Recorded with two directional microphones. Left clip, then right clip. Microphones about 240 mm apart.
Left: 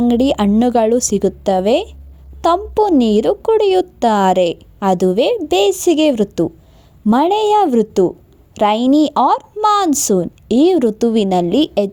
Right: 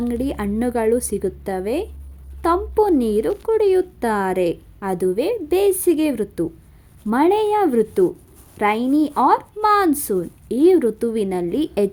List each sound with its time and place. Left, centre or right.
0.1 s a woman's voice: left